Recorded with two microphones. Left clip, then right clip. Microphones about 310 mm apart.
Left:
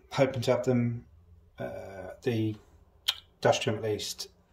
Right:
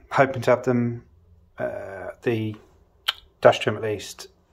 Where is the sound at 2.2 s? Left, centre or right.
Centre.